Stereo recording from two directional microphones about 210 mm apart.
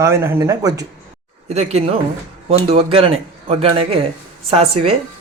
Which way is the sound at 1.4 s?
30° right (ahead or behind).